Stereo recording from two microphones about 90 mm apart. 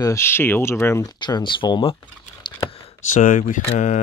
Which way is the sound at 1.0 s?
55° left (ahead or behind).